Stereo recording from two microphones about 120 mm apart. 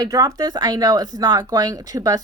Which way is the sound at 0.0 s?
30° right (ahead or behind).